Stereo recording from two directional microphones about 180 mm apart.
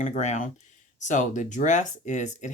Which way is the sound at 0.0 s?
40° left (ahead or behind).